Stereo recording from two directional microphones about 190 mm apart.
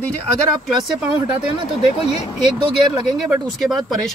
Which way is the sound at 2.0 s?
30° left (ahead or behind).